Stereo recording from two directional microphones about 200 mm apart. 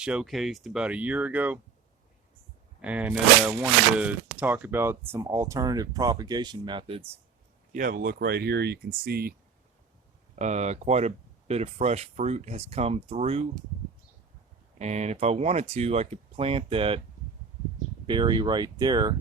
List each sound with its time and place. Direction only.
0.0 s speech: 5° right (ahead or behind)
2.8 s speech: 5° right (ahead or behind); by 7.2 s 25° right (ahead or behind)
7.7 s speech: 40° right (ahead or behind)
10.3 s speech: 35° right (ahead or behind)
14.8 s speech: 35° right (ahead or behind)
18.0 s speech: 25° right (ahead or behind)